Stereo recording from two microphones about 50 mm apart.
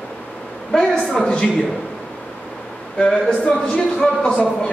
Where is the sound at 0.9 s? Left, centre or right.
Centre.